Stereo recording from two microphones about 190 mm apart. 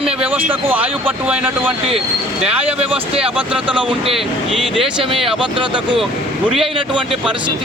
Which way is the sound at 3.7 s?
25° right (ahead or behind).